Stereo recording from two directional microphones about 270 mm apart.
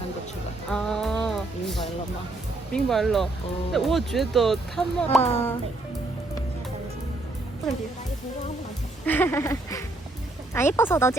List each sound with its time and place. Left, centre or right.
0.7 s music: centre
2.7 s speech: centre
5.2 s a child's voice: left
9.0 s a sound: centre